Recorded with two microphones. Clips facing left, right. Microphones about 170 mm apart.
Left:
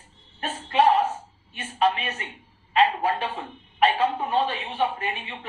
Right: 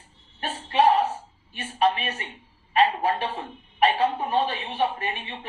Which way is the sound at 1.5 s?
35° right (ahead or behind).